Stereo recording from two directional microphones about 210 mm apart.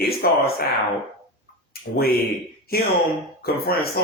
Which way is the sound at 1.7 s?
45° left (ahead or behind).